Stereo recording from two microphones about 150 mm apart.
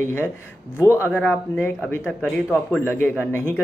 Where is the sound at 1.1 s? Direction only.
10° left (ahead or behind).